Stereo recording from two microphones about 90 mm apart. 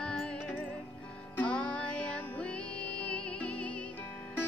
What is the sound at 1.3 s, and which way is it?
Music, 15° left (ahead or behind).